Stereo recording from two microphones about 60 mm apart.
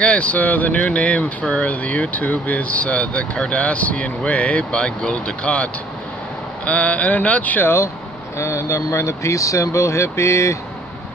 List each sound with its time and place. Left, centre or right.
0.0 s speech: left
8.4 s speech: left